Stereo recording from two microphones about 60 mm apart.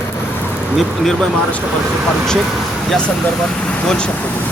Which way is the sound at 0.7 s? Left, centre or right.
Centre.